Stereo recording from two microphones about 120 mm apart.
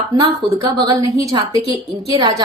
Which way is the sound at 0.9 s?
25° right (ahead or behind).